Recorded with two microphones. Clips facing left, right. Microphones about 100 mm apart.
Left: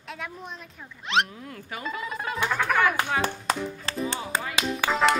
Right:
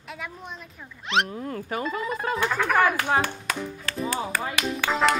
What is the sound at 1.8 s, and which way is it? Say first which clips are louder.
Music: right 2 dB; centre (ahead or behind).